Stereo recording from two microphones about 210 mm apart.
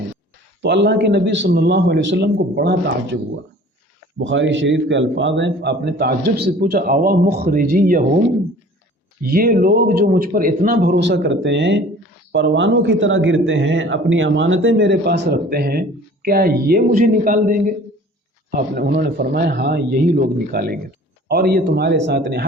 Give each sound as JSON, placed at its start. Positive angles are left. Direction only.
{"t": 0.6, "sound": "a man's voice", "side_deg": -55}
{"t": 4.2, "sound": "a man's voice", "side_deg": -60}
{"t": 9.2, "sound": "a man's voice", "side_deg": -45}